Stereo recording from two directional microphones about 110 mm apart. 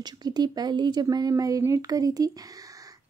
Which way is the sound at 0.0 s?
40° right (ahead or behind).